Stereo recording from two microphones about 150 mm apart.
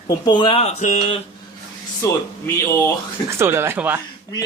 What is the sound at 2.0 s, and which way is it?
Speech, 20° left (ahead or behind).